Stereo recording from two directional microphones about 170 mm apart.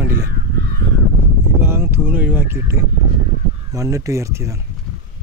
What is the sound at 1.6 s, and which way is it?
Speech, 15° right (ahead or behind).